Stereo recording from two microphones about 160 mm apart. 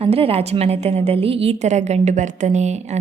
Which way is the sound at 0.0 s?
40° right (ahead or behind).